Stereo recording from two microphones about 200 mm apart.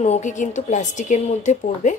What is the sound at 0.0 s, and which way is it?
A woman's voice, 35° left (ahead or behind).